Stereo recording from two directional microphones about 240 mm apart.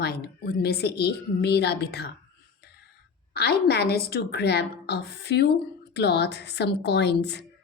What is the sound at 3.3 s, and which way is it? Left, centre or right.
A woman's voice, left.